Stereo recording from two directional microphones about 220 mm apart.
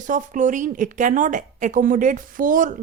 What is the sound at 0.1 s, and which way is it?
Speech, 35° right (ahead or behind).